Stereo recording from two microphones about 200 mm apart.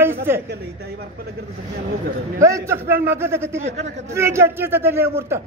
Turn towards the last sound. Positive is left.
turn(degrees=-10)  # may be behind; listen again after turning